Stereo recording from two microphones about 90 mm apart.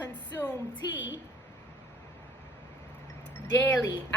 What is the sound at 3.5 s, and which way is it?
Speech, 25° left (ahead or behind).